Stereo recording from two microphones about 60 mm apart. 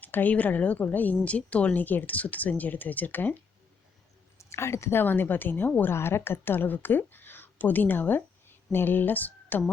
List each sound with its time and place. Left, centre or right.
0.0 s a woman's voice: left
4.4 s a woman's voice: left